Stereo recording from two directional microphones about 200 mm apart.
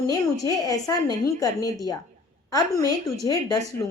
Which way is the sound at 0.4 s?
20° left (ahead or behind).